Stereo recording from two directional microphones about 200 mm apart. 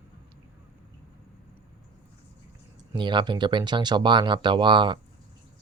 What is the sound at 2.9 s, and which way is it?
Speech, 25° right (ahead or behind).